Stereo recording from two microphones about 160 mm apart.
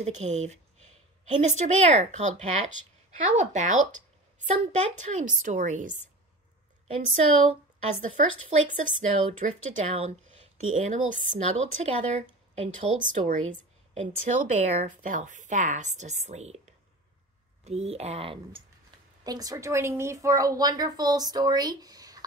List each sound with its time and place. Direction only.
0.0 s a woman's voice: 45° right (ahead or behind)
4.5 s speech: 35° right (ahead or behind)
4.9 s a woman's voice: 50° right (ahead or behind)
7.4 s a woman's voice: 45° right (ahead or behind)
19.2 s a woman's voice: 25° right (ahead or behind)